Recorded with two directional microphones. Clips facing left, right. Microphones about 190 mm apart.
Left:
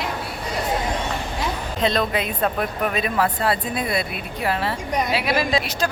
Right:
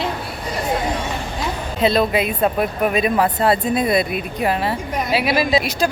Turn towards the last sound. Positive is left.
turn(degrees=-10)  # may be behind; listen again after turning